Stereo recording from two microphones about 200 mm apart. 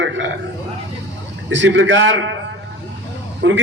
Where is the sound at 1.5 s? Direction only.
65° right (ahead or behind).